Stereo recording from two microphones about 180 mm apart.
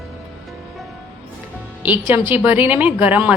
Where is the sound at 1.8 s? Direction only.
10° right (ahead or behind).